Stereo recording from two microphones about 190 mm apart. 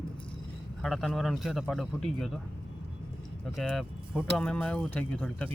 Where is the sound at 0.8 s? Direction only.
Centre (ahead or behind).